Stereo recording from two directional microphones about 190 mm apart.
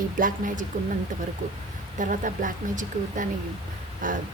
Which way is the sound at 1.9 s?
45° right (ahead or behind).